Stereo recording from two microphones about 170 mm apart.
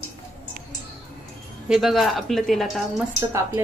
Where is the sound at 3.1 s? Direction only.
15° right (ahead or behind).